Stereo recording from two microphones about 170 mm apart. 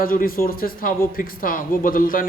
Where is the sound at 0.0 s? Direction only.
60° left (ahead or behind).